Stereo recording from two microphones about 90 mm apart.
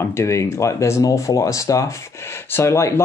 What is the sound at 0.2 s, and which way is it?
Speech, 35° left (ahead or behind).